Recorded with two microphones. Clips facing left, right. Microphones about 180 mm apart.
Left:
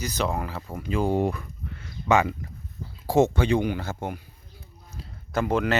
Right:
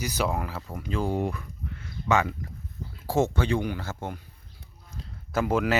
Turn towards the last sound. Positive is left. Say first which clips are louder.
# left 1 dB
turn(degrees=-5)  # may be behind; listen again after turning